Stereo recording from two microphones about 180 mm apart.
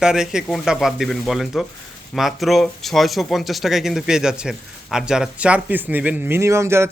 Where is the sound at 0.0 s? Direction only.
5° right (ahead or behind).